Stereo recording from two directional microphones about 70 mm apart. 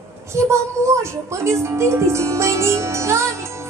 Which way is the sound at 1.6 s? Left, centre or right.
Right.